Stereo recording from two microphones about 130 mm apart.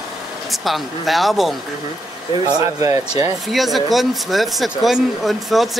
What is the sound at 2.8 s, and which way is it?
Speech, 20° right (ahead or behind).